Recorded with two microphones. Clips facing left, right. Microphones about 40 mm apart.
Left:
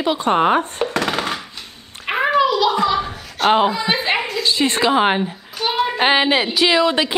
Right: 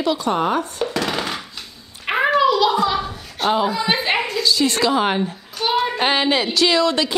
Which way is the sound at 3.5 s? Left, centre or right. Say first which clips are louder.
Left 4 dB; left.